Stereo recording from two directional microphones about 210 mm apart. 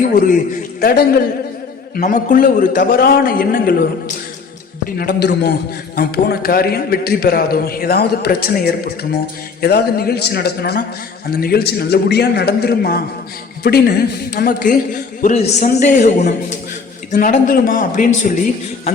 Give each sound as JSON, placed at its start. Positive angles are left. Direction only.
{"t": 0.0, "sound": "a man's voice", "side_deg": 40}
{"t": 4.9, "sound": "a man's voice", "side_deg": 50}